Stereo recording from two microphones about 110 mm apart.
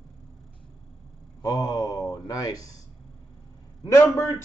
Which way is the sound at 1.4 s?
35° left (ahead or behind).